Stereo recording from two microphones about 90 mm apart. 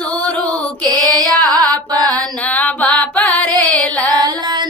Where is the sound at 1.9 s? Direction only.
45° right (ahead or behind).